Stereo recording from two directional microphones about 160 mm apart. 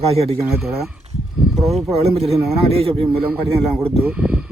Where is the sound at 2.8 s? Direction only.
35° right (ahead or behind).